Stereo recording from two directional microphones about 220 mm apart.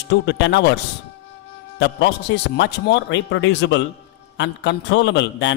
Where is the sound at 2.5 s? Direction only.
55° left (ahead or behind).